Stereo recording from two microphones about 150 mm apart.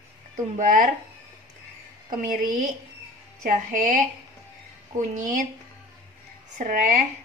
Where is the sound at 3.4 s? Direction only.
60° right (ahead or behind).